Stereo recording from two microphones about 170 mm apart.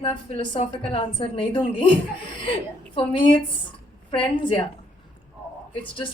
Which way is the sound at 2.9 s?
30° left (ahead or behind).